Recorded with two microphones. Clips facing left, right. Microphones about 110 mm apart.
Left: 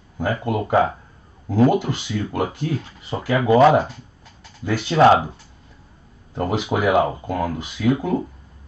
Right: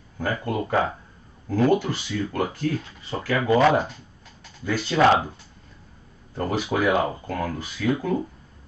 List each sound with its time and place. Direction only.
0.2 s speech: 15° left (ahead or behind)
4.6 s speech: 15° left (ahead or behind)
6.3 s speech: 20° left (ahead or behind)